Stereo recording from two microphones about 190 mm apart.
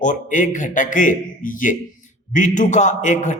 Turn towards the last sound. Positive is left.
turn(degrees=40)  # may be behind; listen again after turning